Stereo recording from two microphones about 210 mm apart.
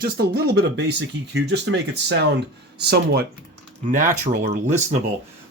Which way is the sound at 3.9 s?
40° right (ahead or behind).